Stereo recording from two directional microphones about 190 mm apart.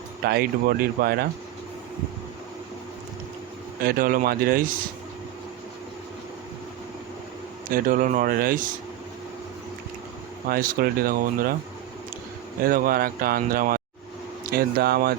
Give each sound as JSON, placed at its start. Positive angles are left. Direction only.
{"t": 0.3, "sound": "speech", "side_deg": -55}
{"t": 3.8, "sound": "a man's voice", "side_deg": -50}
{"t": 7.7, "sound": "a man's voice", "side_deg": -45}
{"t": 10.5, "sound": "a man's voice", "side_deg": -50}
{"t": 12.6, "sound": "a man's voice", "side_deg": -50}